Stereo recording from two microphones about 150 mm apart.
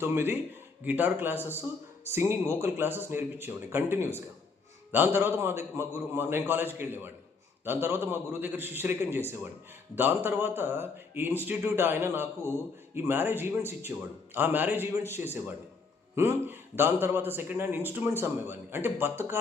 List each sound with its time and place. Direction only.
0.0 s speech: 15° right (ahead or behind)
16.1 s speech: 15° right (ahead or behind)